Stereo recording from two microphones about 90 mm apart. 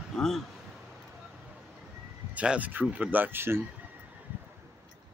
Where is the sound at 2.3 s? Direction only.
15° right (ahead or behind).